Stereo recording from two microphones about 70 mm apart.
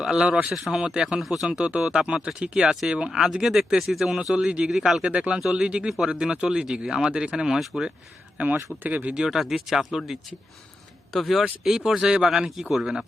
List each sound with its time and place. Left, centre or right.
0.0 s speech: centre
5.0 s speech: centre
8.5 s speech: right
9.1 s speech: centre
11.1 s speech: centre